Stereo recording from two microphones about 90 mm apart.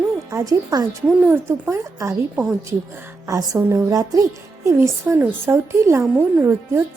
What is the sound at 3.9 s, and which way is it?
A woman's voice, 40° right (ahead or behind).